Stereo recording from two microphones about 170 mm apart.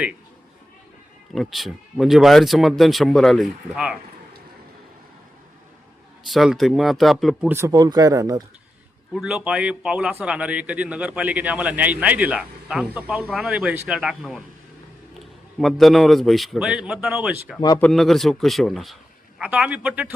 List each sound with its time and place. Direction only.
1.4 s speech: centre (ahead or behind)
6.3 s speech: centre (ahead or behind)
7.5 s speech: 20° right (ahead or behind)
9.1 s a man's voice: 5° right (ahead or behind)
15.5 s a man's voice: centre (ahead or behind)